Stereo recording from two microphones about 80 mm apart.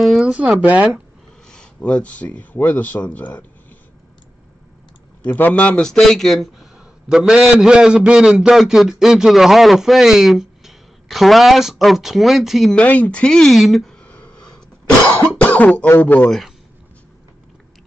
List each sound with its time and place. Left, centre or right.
0.0 s a sound: centre
0.6 s speech: centre
1.5 s speech: centre
5.2 s a man's voice: left; by 12.7 s centre
12.7 s a man's voice: centre
13.9 s a sound: centre
15.0 s cough: centre
16.0 s speech: centre
16.3 s speech: centre